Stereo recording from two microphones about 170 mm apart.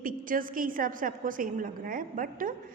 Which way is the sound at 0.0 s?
55° right (ahead or behind).